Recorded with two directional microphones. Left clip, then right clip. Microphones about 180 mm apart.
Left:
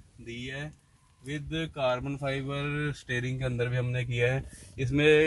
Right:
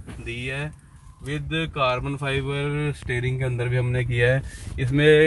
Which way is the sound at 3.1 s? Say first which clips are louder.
Right 2 dB; 20° left (ahead or behind).